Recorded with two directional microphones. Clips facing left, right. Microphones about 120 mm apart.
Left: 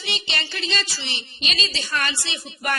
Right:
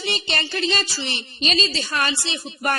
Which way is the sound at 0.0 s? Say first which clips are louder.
Right 4 dB; 45° right (ahead or behind).